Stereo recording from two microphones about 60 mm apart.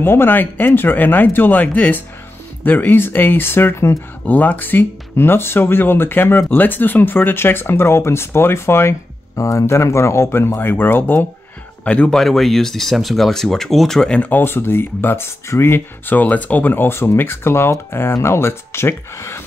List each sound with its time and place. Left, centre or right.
0.0 s speech: left
4.3 s speech: left
9.4 s speech: left
11.8 s speech: left
12.1 s speech: centre
14.3 s speech: left
16.2 s speech: left